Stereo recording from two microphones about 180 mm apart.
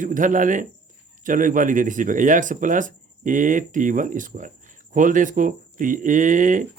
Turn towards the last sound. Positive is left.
turn(degrees=-45)  # may be behind; listen again after turning